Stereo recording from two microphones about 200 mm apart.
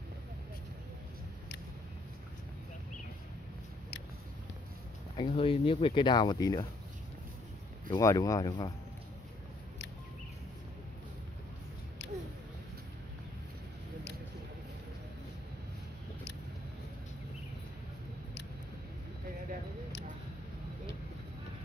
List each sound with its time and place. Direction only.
5.1 s speech: 30° left (ahead or behind)
7.9 s speech: 15° left (ahead or behind)
12.0 s a sound: 65° left (ahead or behind)